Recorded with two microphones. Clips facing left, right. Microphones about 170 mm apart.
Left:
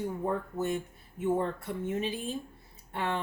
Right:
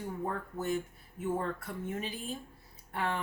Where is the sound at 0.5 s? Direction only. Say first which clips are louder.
Left 4 dB; 50° left (ahead or behind).